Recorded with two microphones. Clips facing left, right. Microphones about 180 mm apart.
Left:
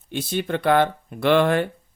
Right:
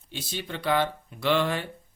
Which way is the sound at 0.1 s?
55° left (ahead or behind).